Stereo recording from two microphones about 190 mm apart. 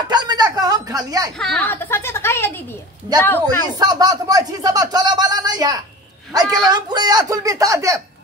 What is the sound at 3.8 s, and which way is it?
Speech, 20° right (ahead or behind).